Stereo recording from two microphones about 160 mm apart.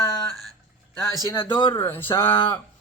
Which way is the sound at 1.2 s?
30° left (ahead or behind).